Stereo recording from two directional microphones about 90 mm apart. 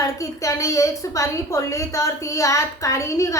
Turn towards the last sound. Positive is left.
turn(degrees=35)  # may be behind; listen again after turning